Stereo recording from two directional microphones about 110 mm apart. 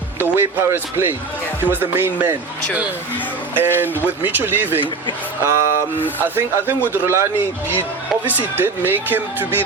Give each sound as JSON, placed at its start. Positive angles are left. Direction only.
{"t": 0.2, "sound": "speech", "side_deg": -20}
{"t": 3.5, "sound": "speech", "side_deg": -20}
{"t": 6.0, "sound": "speech", "side_deg": 15}
{"t": 6.3, "sound": "speech", "side_deg": -20}